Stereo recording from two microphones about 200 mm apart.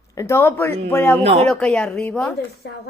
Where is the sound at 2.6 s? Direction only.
55° left (ahead or behind).